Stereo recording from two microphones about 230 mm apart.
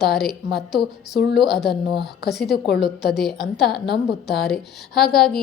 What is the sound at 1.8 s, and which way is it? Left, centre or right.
Speech, left.